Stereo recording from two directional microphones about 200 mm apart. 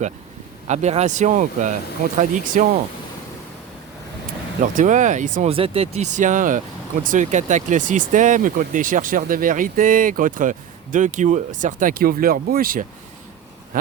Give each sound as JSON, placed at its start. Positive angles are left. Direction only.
{"t": 0.7, "sound": "speech", "side_deg": -35}
{"t": 4.6, "sound": "speech", "side_deg": -40}